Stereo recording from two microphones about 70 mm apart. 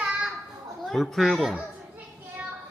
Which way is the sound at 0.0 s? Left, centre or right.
Centre.